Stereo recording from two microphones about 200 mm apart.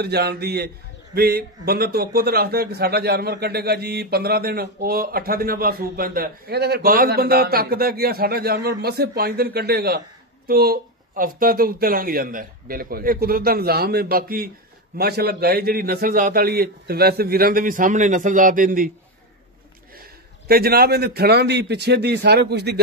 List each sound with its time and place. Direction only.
0.0 s a man's voice: 55° right (ahead or behind)
20.0 s a man's voice: 50° right (ahead or behind)